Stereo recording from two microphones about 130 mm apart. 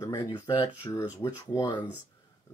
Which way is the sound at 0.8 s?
20° left (ahead or behind).